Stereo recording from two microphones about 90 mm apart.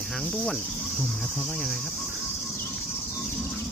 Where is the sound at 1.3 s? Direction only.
5° left (ahead or behind).